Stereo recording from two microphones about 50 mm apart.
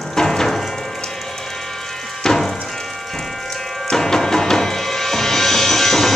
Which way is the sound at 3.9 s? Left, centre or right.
Centre.